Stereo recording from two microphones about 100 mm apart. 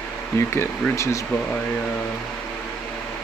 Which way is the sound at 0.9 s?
30° left (ahead or behind).